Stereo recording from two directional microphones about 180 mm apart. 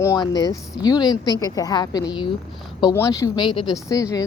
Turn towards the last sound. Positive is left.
turn(degrees=20)  # may be behind; listen again after turning